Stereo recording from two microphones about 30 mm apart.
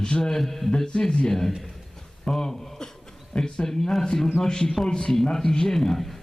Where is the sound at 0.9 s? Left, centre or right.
Left.